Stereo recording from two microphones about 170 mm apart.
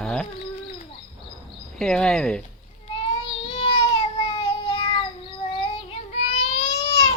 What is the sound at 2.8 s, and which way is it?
Child singing, 30° left (ahead or behind).